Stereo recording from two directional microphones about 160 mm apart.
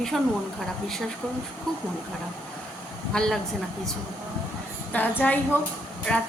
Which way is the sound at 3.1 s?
5° left (ahead or behind).